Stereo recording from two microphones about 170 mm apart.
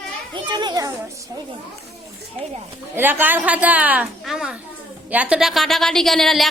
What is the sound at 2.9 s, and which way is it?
A woman's voice, 10° right (ahead or behind).